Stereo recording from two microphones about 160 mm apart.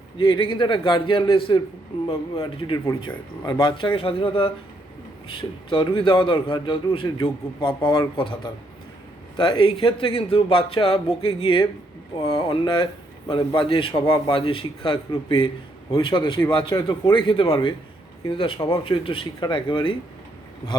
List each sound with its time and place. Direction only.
0.2 s a man's voice: 35° left (ahead or behind)
2.4 s a man's voice: 30° left (ahead or behind)